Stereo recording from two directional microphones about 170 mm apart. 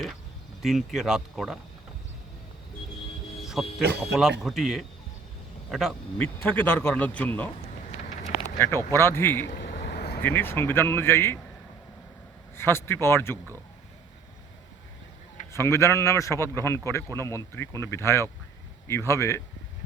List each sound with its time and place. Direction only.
0.6 s speech: centre (ahead or behind)
3.4 s a sound: centre (ahead or behind)
4.0 s speech: centre (ahead or behind)
6.2 s a man's voice: 10° left (ahead or behind)
8.5 s a man's voice: 15° left (ahead or behind)
9.8 s vehicle: 70° left (ahead or behind)
10.2 s a man's voice: 15° left (ahead or behind)
12.5 s a man's voice: 15° left (ahead or behind)
15.5 s a man's voice: 15° left (ahead or behind)